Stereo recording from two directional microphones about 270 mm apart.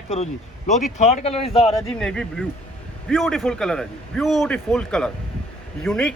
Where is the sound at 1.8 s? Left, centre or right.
Centre.